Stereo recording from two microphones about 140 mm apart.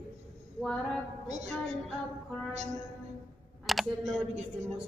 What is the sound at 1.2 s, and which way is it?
Music, 55° right (ahead or behind).